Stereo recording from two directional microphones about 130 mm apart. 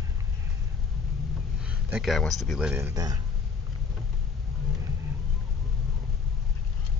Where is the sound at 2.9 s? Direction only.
30° right (ahead or behind).